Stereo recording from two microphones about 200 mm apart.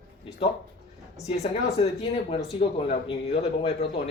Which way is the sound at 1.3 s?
30° left (ahead or behind).